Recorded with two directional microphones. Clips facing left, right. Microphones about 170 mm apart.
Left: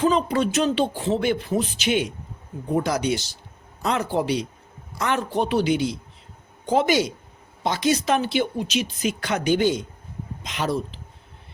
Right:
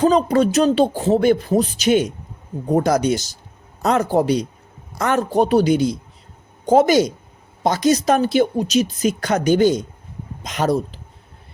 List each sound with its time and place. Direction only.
0.0 s a man's voice: 40° right (ahead or behind)